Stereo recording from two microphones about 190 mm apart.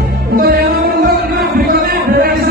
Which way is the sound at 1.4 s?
55° right (ahead or behind).